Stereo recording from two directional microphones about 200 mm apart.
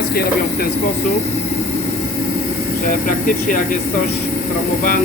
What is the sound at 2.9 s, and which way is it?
Speech, 45° left (ahead or behind).